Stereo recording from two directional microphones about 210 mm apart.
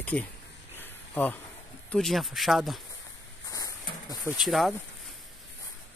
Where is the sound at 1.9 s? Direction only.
Centre (ahead or behind).